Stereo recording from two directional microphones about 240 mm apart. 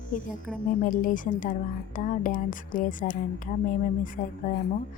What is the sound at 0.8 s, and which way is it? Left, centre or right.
A woman's voice, left.